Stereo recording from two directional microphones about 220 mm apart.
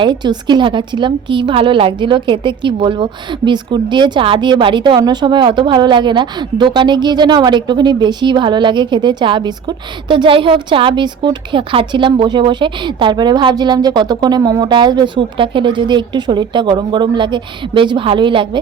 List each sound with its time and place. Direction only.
0.0 s a woman's voice: 20° right (ahead or behind)